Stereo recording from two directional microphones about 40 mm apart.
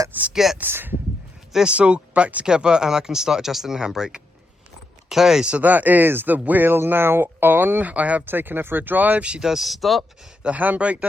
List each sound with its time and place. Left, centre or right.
0.3 s speech: centre
0.6 s speech: right
1.7 s speech: right; by 5.5 s centre
5.6 s speech: right
6.7 s speech: right
8.3 s speech: right
9.4 s speech: centre
9.6 s speech: centre
10.4 s speech: right